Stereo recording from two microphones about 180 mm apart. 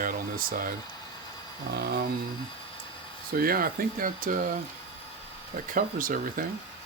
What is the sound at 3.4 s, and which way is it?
Speech, 55° right (ahead or behind).